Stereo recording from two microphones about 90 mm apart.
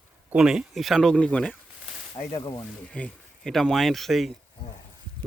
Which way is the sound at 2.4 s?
45° left (ahead or behind).